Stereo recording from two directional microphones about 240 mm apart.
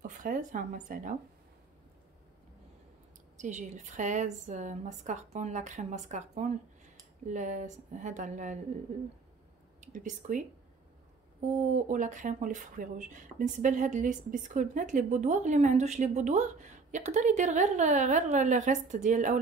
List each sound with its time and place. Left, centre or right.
0.0 s speech: right
3.3 s a woman's voice: right
9.8 s speech: right
11.9 s speech: right